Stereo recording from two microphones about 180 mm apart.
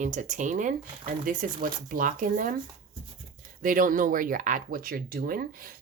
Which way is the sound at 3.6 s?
50° right (ahead or behind).